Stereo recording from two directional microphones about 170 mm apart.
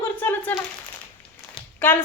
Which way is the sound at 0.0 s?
10° left (ahead or behind).